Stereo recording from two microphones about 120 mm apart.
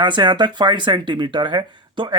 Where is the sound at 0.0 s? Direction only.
40° right (ahead or behind).